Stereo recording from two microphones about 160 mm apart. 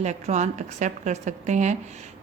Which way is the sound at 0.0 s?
45° right (ahead or behind).